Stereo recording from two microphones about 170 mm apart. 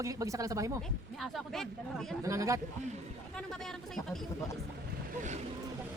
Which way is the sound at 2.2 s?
20° right (ahead or behind).